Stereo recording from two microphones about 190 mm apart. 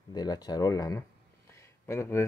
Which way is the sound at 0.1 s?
20° left (ahead or behind).